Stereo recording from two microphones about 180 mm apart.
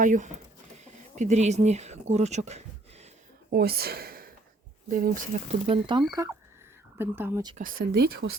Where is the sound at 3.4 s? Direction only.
60° right (ahead or behind).